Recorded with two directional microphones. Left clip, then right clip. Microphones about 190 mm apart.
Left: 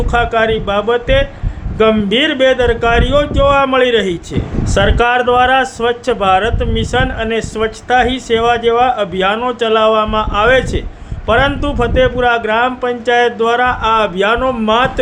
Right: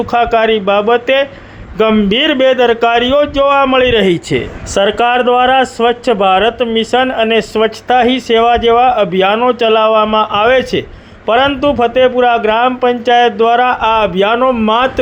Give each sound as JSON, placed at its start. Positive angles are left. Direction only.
{"t": 0.0, "sound": "speech", "side_deg": -20}